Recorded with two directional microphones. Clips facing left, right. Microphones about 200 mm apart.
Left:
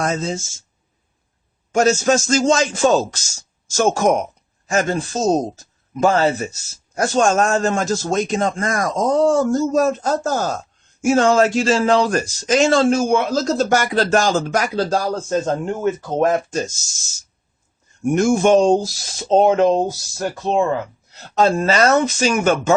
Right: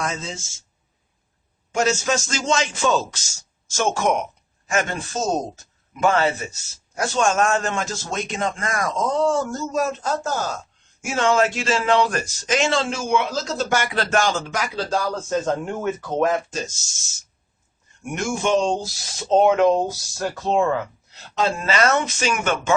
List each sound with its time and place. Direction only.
0.0 s a man's voice: 40° left (ahead or behind)
1.7 s a man's voice: 45° left (ahead or behind)
18.0 s a man's voice: 40° left (ahead or behind)
19.3 s speech: 35° left (ahead or behind)
21.3 s a man's voice: 45° left (ahead or behind)